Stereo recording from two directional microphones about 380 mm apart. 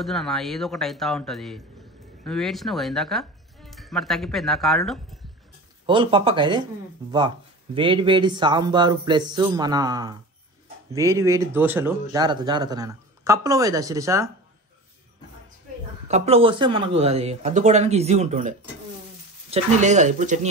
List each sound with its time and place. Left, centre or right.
0.0 s speech: centre
5.9 s speech: centre
16.1 s speech: centre
19.5 s speech: centre